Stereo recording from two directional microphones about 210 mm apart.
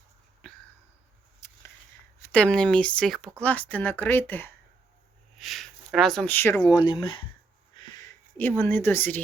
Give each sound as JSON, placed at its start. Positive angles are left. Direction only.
{"t": 1.4, "sound": "a sound", "side_deg": 10}
{"t": 2.2, "sound": "speech", "side_deg": 5}
{"t": 8.4, "sound": "speech", "side_deg": 10}